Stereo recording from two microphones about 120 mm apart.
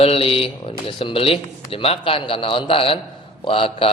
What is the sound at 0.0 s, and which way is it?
Speech, 50° left (ahead or behind).